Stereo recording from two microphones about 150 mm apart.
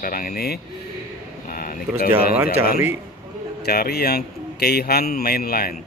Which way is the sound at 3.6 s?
90° left.